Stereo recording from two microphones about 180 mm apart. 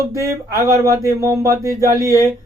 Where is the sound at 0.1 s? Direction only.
15° right (ahead or behind).